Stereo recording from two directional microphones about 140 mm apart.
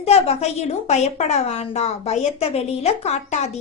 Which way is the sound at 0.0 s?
50° left (ahead or behind).